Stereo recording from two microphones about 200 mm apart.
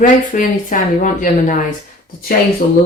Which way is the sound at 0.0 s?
40° left (ahead or behind).